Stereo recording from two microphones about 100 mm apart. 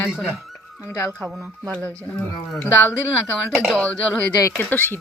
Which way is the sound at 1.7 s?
15° left (ahead or behind).